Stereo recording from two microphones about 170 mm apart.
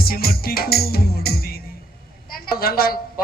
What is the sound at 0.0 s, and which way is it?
Music, 60° left (ahead or behind).